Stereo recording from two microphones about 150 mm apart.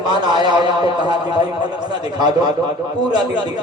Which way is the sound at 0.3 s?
30° right (ahead or behind).